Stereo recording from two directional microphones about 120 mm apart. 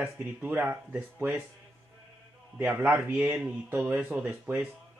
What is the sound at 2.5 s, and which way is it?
Speech, 15° right (ahead or behind).